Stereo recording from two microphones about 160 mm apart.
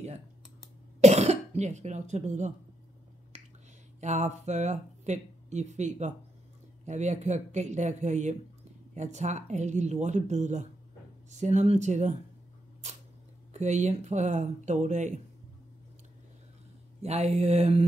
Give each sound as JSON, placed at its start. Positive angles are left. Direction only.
{"t": 1.0, "sound": "speech", "side_deg": -45}
{"t": 4.0, "sound": "speech", "side_deg": -45}
{"t": 13.5, "sound": "speech", "side_deg": -45}
{"t": 17.0, "sound": "mantra", "side_deg": -40}